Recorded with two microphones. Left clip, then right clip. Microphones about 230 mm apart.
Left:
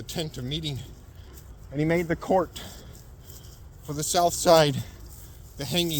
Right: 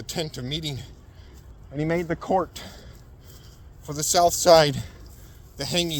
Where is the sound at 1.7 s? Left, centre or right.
Right.